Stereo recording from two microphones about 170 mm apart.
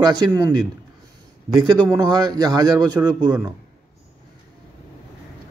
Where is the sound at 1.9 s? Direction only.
20° right (ahead or behind).